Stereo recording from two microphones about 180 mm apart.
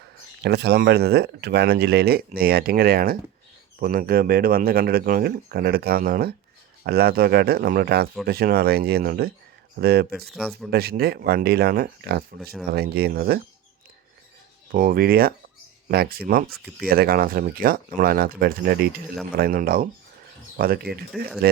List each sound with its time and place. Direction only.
0.4 s speech: 65° right (ahead or behind)
10.2 s speech: centre (ahead or behind)
10.7 s speech: 60° right (ahead or behind)
14.7 s speech: 50° right (ahead or behind)
21.1 s speech: centre (ahead or behind)